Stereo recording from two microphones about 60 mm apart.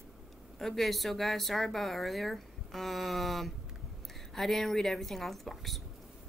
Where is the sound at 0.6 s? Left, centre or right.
Centre.